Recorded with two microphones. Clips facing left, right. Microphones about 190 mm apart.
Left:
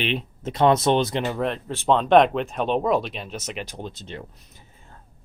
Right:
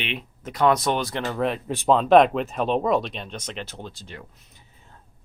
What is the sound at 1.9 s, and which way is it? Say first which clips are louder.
Speech: right 1 dB; centre (ahead or behind).